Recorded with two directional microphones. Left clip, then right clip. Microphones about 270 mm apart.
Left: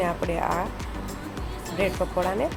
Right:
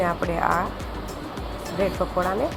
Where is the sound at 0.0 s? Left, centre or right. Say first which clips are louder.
Right 3 dB; centre.